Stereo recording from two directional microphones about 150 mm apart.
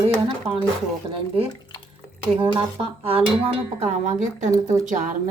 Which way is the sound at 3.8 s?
50° right (ahead or behind).